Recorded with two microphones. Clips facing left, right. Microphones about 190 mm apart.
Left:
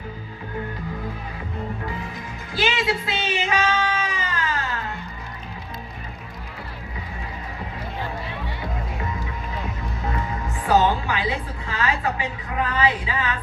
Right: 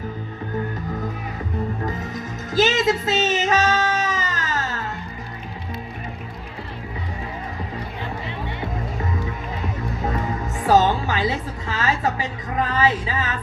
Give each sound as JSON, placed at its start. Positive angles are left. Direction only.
{"t": 1.8, "sound": "music", "side_deg": -40}
{"t": 10.7, "sound": "music", "side_deg": -40}